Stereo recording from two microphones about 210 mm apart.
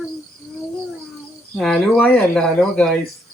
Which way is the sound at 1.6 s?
Centre (ahead or behind).